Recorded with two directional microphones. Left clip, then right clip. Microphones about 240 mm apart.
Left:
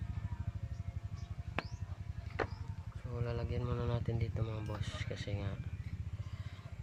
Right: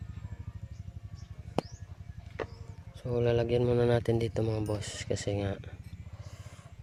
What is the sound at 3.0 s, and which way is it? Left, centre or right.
Speech, right.